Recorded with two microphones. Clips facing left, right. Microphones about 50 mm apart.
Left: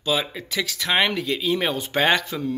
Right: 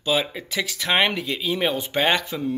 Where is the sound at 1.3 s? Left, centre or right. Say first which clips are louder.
Left 1 dB; centre.